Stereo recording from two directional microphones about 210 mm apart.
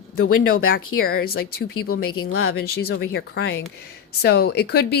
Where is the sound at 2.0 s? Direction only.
85° left.